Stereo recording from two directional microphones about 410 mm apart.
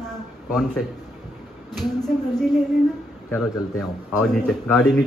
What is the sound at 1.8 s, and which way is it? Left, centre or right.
Speech, centre.